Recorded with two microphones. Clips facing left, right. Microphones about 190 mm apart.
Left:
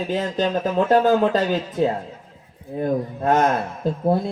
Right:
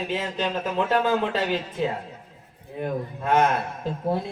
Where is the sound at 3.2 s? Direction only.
40° left (ahead or behind).